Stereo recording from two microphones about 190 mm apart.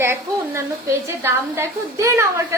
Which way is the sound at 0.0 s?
15° right (ahead or behind).